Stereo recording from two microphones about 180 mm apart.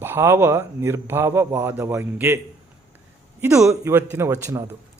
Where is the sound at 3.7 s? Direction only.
15° right (ahead or behind).